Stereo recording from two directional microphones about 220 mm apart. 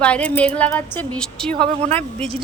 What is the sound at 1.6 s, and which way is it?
Speech, 25° right (ahead or behind).